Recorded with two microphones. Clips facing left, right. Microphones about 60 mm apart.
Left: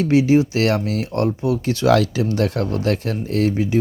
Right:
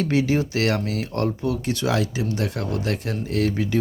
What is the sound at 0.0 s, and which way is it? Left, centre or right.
Speech, left.